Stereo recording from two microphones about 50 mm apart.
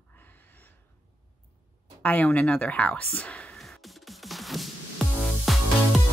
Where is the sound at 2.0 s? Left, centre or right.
Left.